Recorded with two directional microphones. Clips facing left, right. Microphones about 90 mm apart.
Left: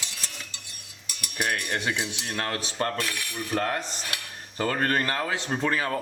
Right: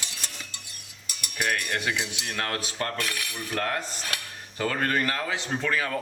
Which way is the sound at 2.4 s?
25° left (ahead or behind).